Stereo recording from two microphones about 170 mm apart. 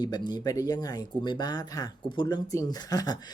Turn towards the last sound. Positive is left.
turn(degrees=20)  # may be behind; listen again after turning